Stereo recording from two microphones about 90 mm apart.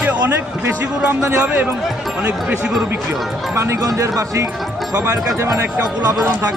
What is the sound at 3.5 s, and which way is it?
Speech, 30° right (ahead or behind).